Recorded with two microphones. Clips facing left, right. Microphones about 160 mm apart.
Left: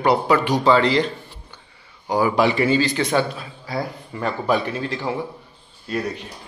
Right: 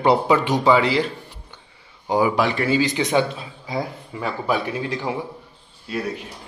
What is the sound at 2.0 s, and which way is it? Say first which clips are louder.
Speech: right 1 dB; 20° right (ahead or behind).